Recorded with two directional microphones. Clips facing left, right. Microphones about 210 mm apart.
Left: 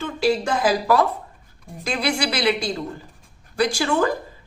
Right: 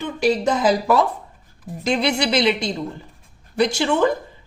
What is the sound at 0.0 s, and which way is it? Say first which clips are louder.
A woman's voice: right 2 dB; 20° right (ahead or behind).